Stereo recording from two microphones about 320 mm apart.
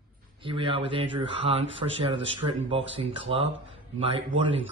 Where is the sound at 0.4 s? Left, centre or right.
Centre.